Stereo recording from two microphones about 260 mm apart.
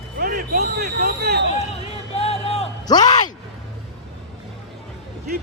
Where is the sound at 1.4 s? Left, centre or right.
Left.